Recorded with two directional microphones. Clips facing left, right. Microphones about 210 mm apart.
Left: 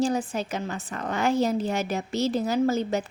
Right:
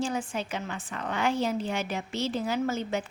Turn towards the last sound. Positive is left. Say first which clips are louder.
# left 5 dB
turn(degrees=40)  # may be behind; listen again after turning